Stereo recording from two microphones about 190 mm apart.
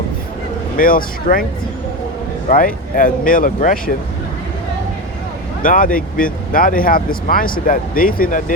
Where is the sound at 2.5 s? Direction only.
45° left (ahead or behind).